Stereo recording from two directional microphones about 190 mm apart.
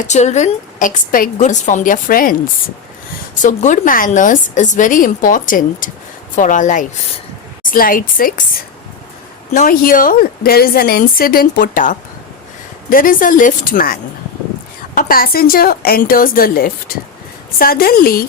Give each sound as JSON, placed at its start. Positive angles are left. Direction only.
{"t": 0.1, "sound": "a woman's voice", "side_deg": 35}
{"t": 3.4, "sound": "a woman's voice", "side_deg": 40}
{"t": 9.5, "sound": "a woman's voice", "side_deg": 45}